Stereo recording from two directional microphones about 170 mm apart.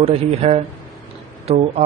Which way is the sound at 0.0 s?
35° right (ahead or behind).